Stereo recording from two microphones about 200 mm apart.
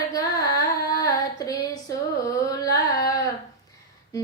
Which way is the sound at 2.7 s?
15° left (ahead or behind).